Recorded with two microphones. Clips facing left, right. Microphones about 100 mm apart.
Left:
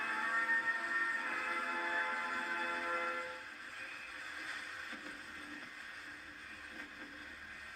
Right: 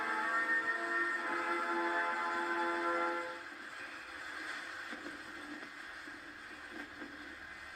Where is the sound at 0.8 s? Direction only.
35° right (ahead or behind).